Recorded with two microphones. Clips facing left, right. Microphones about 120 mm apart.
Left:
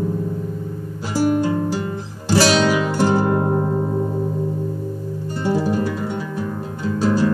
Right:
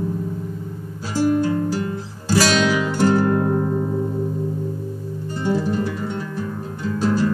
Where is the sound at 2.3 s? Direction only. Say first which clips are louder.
Left 2 dB; 30° left (ahead or behind).